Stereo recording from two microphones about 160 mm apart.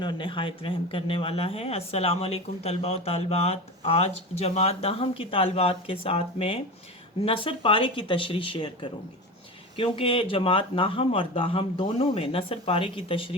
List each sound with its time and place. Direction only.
0.0 s speech: 30° left (ahead or behind)